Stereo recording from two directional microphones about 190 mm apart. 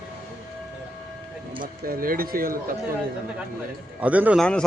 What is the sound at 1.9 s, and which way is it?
Speech, 50° right (ahead or behind).